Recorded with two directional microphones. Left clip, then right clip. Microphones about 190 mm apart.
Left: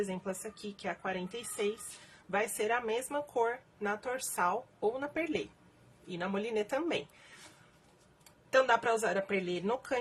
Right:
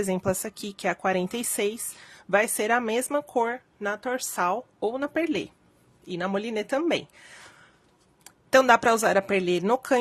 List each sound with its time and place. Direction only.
0.8 s a woman's voice: 60° right (ahead or behind)
8.2 s speech: 55° right (ahead or behind)